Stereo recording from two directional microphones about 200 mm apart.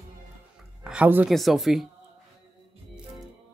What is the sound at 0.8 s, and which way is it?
Speech, 5° right (ahead or behind).